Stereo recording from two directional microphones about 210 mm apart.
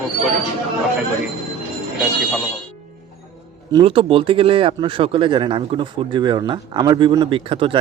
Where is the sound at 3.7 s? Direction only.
25° right (ahead or behind).